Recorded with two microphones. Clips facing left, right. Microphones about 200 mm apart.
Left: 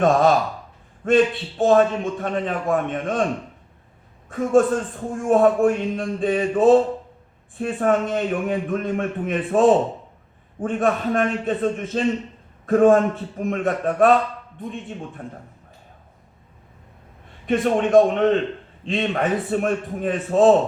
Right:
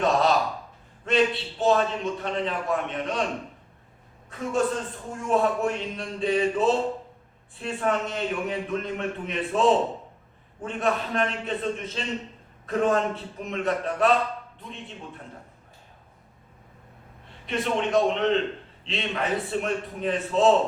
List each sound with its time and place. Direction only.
0.0 s a man's voice: 50° left (ahead or behind)
4.3 s a man's voice: 50° left (ahead or behind)
17.4 s a man's voice: 50° left (ahead or behind)